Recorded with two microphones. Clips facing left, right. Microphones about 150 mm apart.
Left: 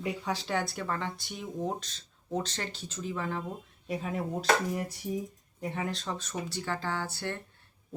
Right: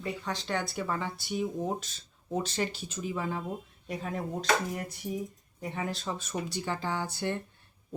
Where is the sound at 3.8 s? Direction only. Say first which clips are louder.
Left 2 dB; 5° left (ahead or behind).